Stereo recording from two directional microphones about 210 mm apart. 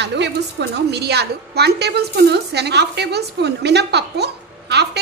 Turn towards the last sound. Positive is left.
turn(degrees=-50)  # may be behind; listen again after turning